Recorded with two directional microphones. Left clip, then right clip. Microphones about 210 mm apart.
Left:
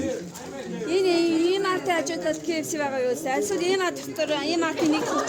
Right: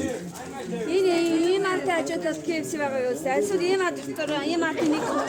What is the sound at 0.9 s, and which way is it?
A woman's voice, 35° left (ahead or behind).